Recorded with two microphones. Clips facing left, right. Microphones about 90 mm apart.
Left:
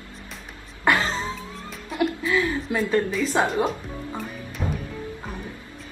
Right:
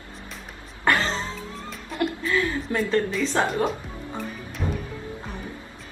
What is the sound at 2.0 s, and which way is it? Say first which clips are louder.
A woman's voice: left 2 dB; 15° left (ahead or behind).